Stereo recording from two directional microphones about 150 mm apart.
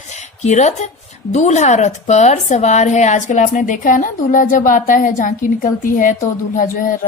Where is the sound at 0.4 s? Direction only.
50° left (ahead or behind).